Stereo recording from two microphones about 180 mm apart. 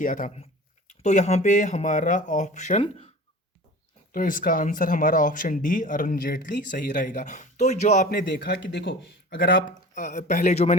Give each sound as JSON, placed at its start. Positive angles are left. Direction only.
{"t": 0.0, "sound": "speech", "side_deg": 50}
{"t": 4.1, "sound": "speech", "side_deg": 50}
{"t": 8.2, "sound": "speech", "side_deg": 70}
{"t": 9.9, "sound": "speech", "side_deg": 40}